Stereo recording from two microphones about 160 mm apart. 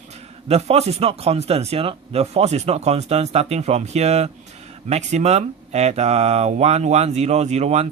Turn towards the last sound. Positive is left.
turn(degrees=-40)  # may be behind; listen again after turning